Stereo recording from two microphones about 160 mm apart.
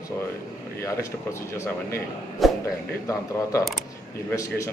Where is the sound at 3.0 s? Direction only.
20° left (ahead or behind).